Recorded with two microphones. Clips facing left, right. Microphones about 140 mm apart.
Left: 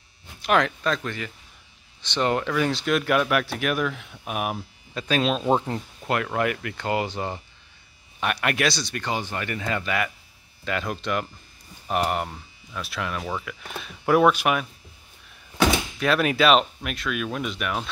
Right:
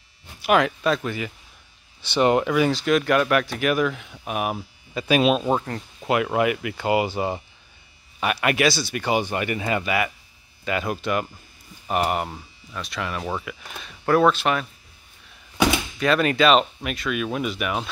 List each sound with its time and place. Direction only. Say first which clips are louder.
0.4 s speech: right 2 dB; 5° right (ahead or behind)
2.7 s speech: right 3 dB; centre (ahead or behind)
5.5 s speech: left 1 dB; 20° left (ahead or behind)
6.0 s speech: right 4 dB; 10° right (ahead or behind); by 14.7 s 10° left (ahead or behind)
16.0 s speech: right 2 dB; 5° left (ahead or behind)